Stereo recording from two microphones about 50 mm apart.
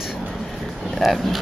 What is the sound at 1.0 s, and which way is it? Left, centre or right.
Speech, centre.